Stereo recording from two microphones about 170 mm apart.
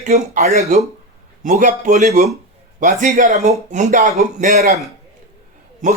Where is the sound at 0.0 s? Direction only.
45° right (ahead or behind).